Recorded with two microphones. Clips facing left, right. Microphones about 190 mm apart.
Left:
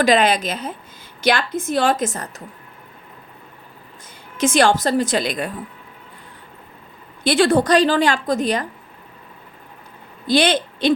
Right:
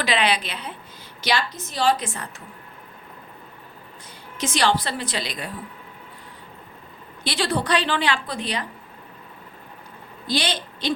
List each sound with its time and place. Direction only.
0.0 s a woman's voice: 45° left (ahead or behind)
4.4 s a woman's voice: 50° left (ahead or behind)
7.3 s a woman's voice: 50° left (ahead or behind)
10.2 s speech: 55° left (ahead or behind)